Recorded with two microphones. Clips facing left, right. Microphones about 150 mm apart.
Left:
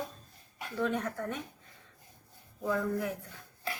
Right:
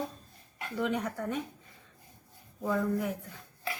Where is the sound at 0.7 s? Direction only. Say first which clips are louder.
Even; 10° right (ahead or behind).